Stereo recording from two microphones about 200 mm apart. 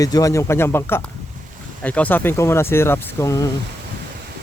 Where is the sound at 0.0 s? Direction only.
15° left (ahead or behind).